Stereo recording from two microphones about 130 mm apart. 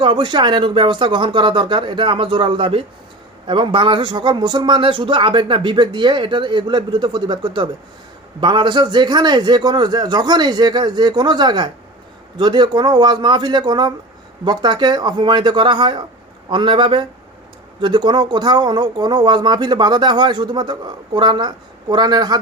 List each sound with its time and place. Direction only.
0.0 s speech: 35° right (ahead or behind)